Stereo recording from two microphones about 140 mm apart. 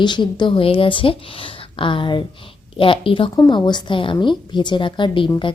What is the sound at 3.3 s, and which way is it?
Speech, 30° left (ahead or behind).